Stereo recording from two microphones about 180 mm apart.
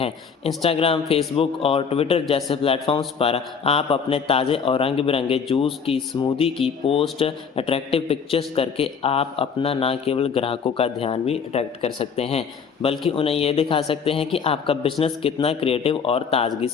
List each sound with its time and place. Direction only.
0.0 s a man's voice: 35° left (ahead or behind)